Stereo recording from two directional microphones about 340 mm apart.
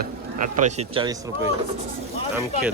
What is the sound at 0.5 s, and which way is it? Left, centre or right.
Speech, centre.